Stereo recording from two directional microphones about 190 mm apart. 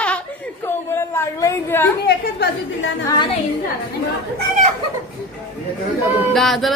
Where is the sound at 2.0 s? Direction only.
60° left (ahead or behind).